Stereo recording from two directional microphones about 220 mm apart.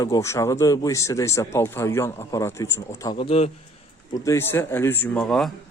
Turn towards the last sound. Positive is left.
turn(degrees=0)  # may be behind; listen again after turning